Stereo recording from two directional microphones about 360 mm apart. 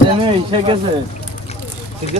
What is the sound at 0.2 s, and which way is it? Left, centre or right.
Speech, centre.